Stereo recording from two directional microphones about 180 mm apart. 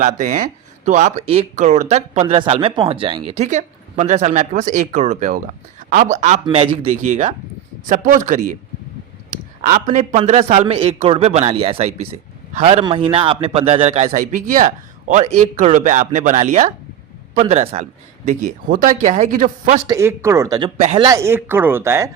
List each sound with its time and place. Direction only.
0.0 s speech: 45° right (ahead or behind)
6.4 s speech: 30° right (ahead or behind)
18.3 s speech: 50° right (ahead or behind)
19.9 s speech: 15° right (ahead or behind)
20.7 s speech: 35° right (ahead or behind)
21.0 s speech: 15° right (ahead or behind)